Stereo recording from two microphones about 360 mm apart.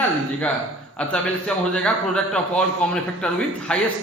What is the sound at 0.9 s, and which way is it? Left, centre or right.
A man's voice, centre.